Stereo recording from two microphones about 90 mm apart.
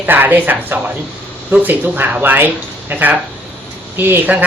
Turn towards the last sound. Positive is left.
turn(degrees=-20)  # may be behind; listen again after turning